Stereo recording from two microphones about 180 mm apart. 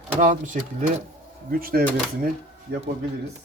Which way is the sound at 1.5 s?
55° right (ahead or behind).